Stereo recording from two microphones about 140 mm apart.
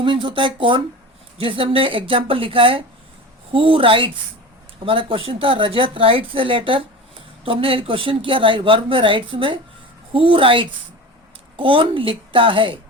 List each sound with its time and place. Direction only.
0.0 s speech: 35° right (ahead or behind)